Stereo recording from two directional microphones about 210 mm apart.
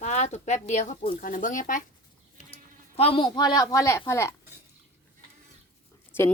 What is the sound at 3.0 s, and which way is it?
A woman's voice, 25° left (ahead or behind).